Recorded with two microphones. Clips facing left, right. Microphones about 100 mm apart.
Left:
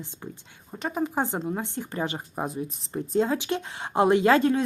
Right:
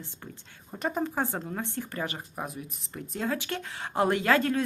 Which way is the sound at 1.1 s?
20° left (ahead or behind).